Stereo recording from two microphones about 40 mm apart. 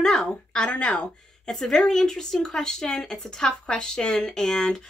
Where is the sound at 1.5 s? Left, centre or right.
Centre.